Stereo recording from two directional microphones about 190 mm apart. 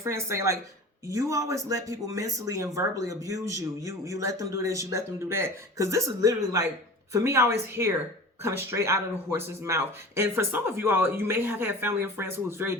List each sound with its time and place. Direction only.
0.0 s speech: 15° right (ahead or behind)